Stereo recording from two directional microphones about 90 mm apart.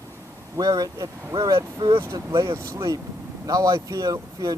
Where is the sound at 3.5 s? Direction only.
40° right (ahead or behind).